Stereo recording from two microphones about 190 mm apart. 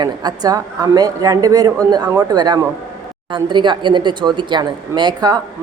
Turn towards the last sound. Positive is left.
turn(degrees=-20)  # may be behind; listen again after turning